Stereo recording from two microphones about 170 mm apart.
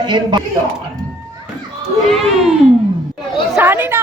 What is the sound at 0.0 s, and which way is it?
Speech, 25° right (ahead or behind).